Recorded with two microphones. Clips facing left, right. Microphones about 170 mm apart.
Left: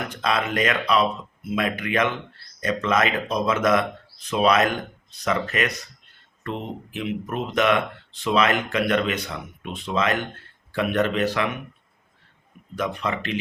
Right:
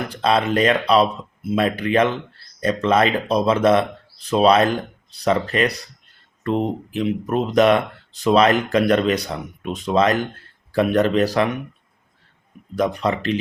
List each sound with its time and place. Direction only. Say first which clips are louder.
0.1 s speech: right 7 dB; 30° right (ahead or behind)
12.7 s speech: right 6 dB; 35° right (ahead or behind)